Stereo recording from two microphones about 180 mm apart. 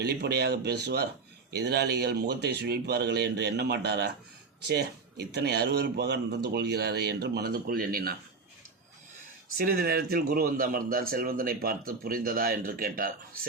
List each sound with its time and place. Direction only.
0.0 s speech: 65° right (ahead or behind)
9.6 s speech: 55° right (ahead or behind)